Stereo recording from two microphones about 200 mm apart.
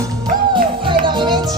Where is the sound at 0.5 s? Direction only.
25° right (ahead or behind).